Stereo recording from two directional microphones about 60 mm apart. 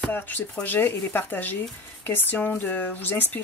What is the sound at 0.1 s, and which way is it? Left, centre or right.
Speech, left.